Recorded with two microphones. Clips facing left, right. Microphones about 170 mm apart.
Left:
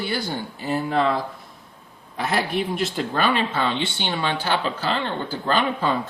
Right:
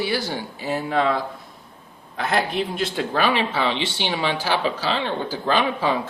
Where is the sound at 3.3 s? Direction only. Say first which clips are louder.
Right 1 dB; 75° right (ahead or behind).